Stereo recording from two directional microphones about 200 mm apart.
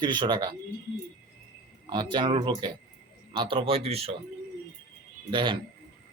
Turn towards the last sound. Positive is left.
turn(degrees=-25)  # may be behind; listen again after turning